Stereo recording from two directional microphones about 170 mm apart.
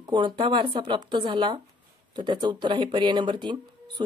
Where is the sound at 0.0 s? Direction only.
25° right (ahead or behind).